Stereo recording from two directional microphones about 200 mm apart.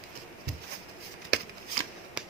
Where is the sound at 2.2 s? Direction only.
5° right (ahead or behind).